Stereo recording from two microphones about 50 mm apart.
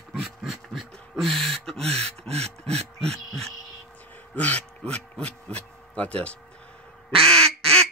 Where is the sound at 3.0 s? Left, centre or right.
Centre.